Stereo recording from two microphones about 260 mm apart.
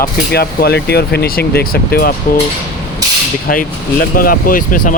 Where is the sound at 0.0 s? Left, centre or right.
Left.